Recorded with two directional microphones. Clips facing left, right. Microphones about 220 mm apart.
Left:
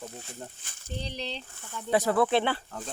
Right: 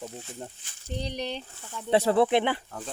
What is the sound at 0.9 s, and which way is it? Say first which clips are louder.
Speech: right 4 dB; 15° right (ahead or behind).